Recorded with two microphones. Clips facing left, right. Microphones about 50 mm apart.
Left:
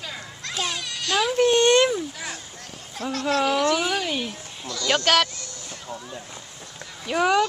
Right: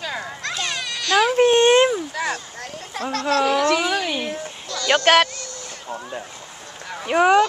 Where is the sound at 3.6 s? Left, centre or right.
Right.